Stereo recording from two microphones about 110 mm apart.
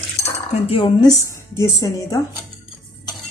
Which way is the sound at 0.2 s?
60° left (ahead or behind).